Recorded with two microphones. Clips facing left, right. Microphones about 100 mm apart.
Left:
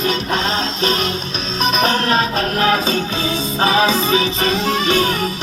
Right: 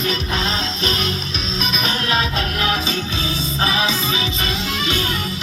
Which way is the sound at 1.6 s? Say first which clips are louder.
Left 7 dB; 45° left (ahead or behind).